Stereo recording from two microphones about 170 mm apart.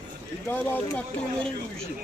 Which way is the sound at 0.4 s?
10° left (ahead or behind).